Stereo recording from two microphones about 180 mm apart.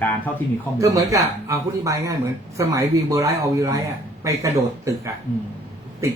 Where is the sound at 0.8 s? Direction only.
20° right (ahead or behind).